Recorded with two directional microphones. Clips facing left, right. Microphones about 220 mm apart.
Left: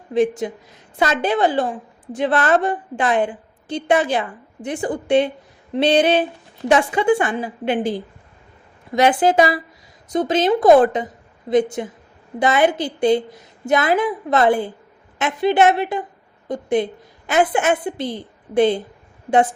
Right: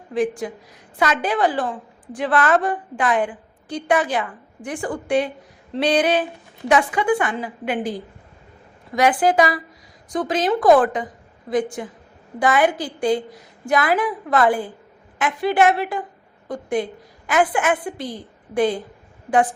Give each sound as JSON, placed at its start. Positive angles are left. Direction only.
{"t": 0.1, "sound": "a woman's voice", "side_deg": 25}